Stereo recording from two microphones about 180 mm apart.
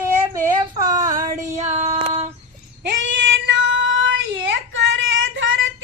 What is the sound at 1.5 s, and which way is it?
Female singing, 35° right (ahead or behind).